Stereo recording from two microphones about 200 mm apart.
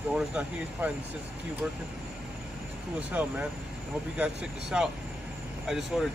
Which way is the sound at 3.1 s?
10° right (ahead or behind).